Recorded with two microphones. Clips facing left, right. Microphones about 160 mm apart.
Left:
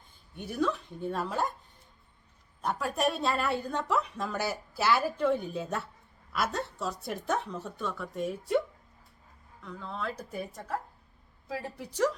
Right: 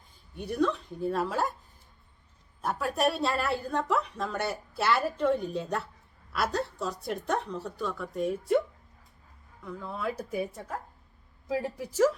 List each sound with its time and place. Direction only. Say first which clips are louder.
0.3 s a woman's voice: right 2 dB; centre (ahead or behind)
2.6 s a woman's voice: right 2 dB; centre (ahead or behind)
9.6 s speech: right 3 dB; 10° right (ahead or behind)
11.4 s speech: right 6 dB; 15° right (ahead or behind)